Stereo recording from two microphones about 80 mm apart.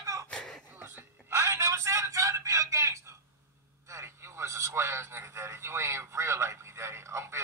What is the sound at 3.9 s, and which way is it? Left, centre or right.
Radio, right.